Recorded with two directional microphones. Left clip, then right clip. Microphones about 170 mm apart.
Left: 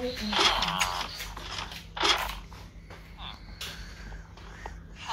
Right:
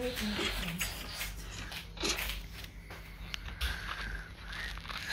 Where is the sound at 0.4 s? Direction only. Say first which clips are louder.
Left 17 dB; centre (ahead or behind).